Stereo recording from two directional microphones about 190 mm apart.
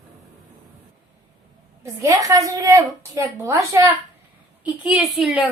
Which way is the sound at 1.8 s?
15° right (ahead or behind).